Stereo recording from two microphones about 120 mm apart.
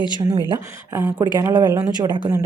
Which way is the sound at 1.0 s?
20° right (ahead or behind).